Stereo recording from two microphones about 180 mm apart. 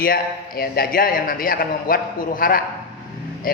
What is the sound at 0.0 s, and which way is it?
A man's voice, 55° left (ahead or behind).